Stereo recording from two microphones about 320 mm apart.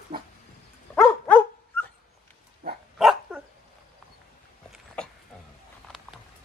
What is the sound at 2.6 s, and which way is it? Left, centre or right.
Dog, right.